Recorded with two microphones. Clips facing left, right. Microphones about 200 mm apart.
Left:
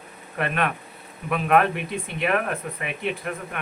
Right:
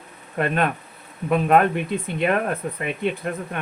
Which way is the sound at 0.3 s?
30° right (ahead or behind).